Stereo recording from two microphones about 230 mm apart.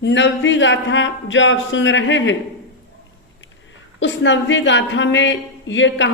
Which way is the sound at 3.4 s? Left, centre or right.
Left.